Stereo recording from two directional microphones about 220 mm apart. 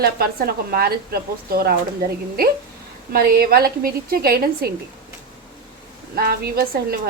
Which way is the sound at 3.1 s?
45° right (ahead or behind).